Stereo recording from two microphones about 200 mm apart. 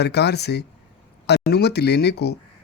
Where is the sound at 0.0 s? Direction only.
55° left (ahead or behind).